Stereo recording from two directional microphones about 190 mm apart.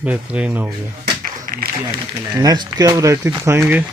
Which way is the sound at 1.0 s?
50° right (ahead or behind).